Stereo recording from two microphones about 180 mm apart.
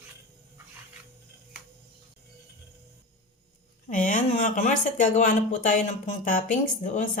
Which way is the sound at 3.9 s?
45° left (ahead or behind).